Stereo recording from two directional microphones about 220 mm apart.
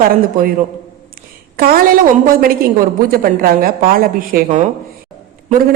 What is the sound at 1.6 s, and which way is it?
Speech, 40° right (ahead or behind).